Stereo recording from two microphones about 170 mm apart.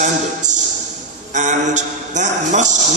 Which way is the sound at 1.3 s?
45° right (ahead or behind).